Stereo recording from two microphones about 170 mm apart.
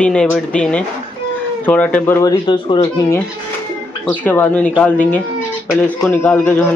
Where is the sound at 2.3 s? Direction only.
25° left (ahead or behind).